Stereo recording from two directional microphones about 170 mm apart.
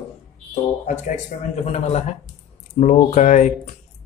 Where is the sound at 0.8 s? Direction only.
45° left (ahead or behind).